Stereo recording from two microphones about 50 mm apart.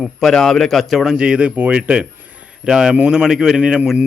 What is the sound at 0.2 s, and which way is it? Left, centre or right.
Speech, centre.